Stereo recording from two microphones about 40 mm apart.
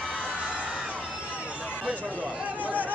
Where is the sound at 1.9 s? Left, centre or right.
Right.